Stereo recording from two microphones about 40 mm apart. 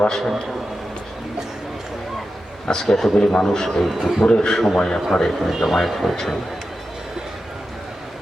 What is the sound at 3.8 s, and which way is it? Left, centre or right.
Speech, centre.